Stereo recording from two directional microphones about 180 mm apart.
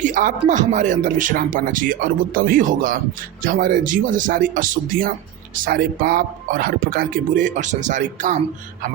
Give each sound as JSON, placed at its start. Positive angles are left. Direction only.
{"t": 0.0, "sound": "speech", "side_deg": -45}